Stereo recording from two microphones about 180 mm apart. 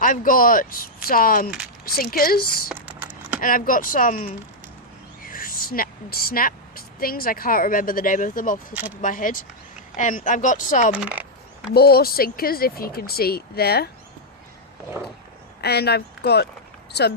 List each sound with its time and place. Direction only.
0.0 s speech: 50° left (ahead or behind)
2.7 s a sound: 10° right (ahead or behind)
3.4 s a woman's voice: 50° left (ahead or behind)
10.9 s a sound: 10° right (ahead or behind)
11.7 s speech: 60° left (ahead or behind)
15.6 s speech: 65° left (ahead or behind)